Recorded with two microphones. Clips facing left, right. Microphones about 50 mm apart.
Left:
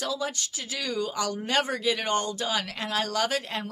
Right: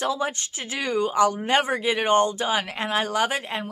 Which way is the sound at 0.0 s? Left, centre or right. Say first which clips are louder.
Right 5 dB; right.